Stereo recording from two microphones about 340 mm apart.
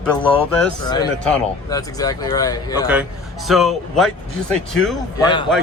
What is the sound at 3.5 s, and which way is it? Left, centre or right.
Speech, centre.